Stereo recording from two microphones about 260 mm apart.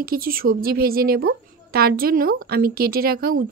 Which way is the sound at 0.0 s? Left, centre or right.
Right.